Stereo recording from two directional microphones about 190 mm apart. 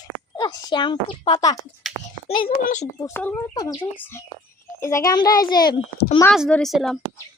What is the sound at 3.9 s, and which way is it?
A child's voice, 10° left (ahead or behind).